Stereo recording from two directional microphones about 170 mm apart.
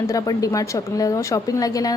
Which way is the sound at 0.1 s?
20° left (ahead or behind).